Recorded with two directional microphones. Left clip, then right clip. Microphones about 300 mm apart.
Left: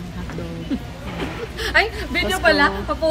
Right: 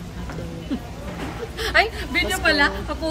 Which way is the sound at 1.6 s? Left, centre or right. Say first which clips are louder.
Left 1 dB; centre.